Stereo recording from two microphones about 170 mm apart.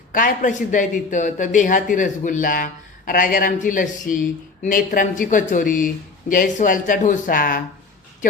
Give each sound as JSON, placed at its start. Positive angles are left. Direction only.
{"t": 0.1, "sound": "speech", "side_deg": 50}